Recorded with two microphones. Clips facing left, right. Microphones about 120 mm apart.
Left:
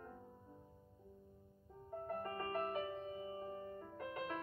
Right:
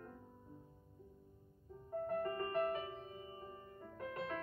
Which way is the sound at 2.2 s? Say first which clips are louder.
Right 3 dB; 20° left (ahead or behind).